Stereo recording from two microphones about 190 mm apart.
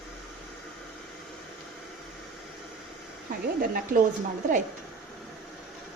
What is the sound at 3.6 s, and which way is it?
Speech, 50° right (ahead or behind).